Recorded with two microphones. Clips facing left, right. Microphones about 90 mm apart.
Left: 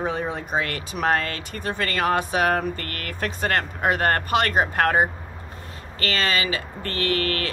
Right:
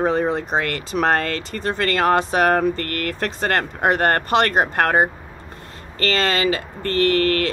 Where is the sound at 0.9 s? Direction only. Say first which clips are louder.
Right 5 dB; 55° right (ahead or behind).